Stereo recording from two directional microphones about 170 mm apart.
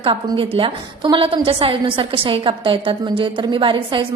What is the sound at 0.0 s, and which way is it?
A woman's voice, 30° right (ahead or behind).